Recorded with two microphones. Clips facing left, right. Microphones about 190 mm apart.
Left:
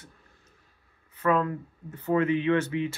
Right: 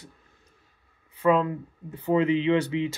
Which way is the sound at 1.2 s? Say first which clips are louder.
Right 3 dB; 20° right (ahead or behind).